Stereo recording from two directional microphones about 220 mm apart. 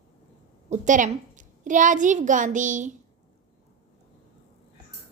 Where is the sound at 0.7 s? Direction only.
35° right (ahead or behind).